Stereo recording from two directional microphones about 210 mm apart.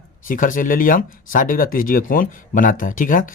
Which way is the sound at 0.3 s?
40° left (ahead or behind).